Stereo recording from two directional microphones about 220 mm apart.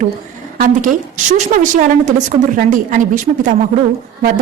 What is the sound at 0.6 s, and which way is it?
A woman's voice, 35° right (ahead or behind).